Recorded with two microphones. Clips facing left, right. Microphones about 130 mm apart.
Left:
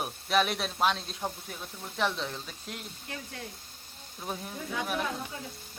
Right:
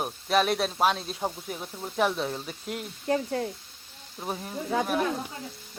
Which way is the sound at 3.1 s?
35° right (ahead or behind).